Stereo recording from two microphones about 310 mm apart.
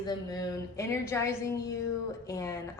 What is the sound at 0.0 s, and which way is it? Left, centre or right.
A woman's voice, centre.